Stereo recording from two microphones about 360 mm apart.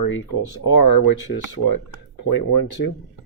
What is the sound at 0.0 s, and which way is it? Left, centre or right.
Speech, left.